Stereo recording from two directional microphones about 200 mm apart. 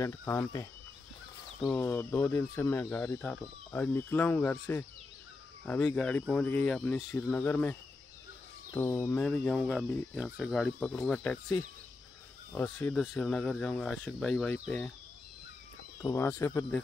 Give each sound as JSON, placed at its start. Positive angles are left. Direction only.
{"t": 0.0, "sound": "speech", "side_deg": 15}
{"t": 7.0, "sound": "speech", "side_deg": 15}
{"t": 8.7, "sound": "speech", "side_deg": 10}
{"t": 16.0, "sound": "speech", "side_deg": 15}